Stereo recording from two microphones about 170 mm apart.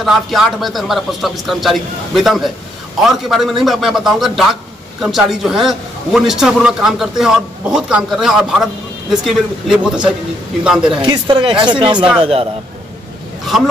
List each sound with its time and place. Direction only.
0.0 s a man's voice: centre (ahead or behind)
10.9 s a man's voice: 30° right (ahead or behind)